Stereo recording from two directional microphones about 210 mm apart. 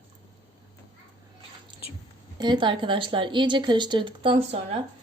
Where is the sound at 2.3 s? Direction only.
20° right (ahead or behind).